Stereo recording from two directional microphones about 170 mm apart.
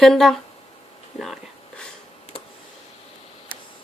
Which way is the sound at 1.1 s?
Centre (ahead or behind).